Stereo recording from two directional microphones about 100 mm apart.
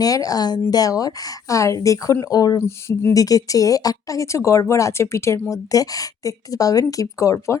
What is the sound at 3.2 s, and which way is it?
Speech, 35° left (ahead or behind).